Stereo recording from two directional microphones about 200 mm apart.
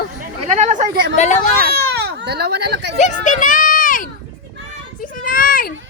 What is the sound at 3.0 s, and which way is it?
Children playing, 40° left (ahead or behind).